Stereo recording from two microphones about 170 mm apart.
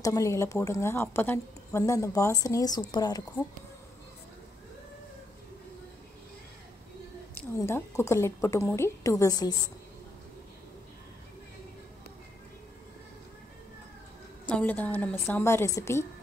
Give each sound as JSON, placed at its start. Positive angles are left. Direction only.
{"t": 0.0, "sound": "a woman's voice", "side_deg": 20}
{"t": 7.3, "sound": "a woman's voice", "side_deg": 15}
{"t": 14.5, "sound": "a woman's voice", "side_deg": 10}